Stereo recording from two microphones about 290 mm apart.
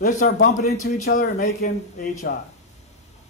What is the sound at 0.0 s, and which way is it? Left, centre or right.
Speech, left.